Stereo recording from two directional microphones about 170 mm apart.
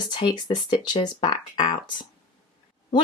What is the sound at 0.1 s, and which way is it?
Speech, 25° left (ahead or behind).